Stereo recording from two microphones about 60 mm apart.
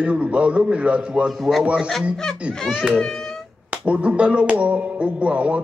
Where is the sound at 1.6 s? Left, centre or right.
Right.